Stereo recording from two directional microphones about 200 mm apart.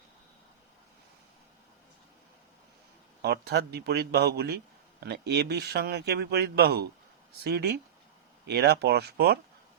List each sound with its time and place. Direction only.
3.2 s a man's voice: 50° right (ahead or behind)